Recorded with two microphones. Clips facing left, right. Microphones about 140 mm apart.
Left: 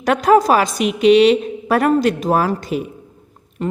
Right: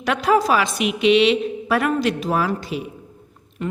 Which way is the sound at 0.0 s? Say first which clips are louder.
Left 5 dB; 45° left (ahead or behind).